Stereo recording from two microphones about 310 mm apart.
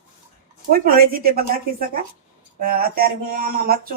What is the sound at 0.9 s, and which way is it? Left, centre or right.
Speech, right.